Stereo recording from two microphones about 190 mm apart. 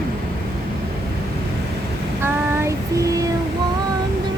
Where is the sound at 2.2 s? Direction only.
15° right (ahead or behind).